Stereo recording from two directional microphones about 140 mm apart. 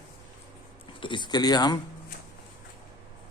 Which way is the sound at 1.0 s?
35° left (ahead or behind).